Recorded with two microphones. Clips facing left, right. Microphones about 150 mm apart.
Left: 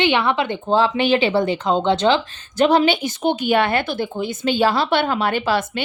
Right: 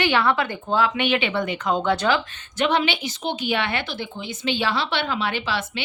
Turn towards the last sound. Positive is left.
turn(degrees=50)  # may be behind; listen again after turning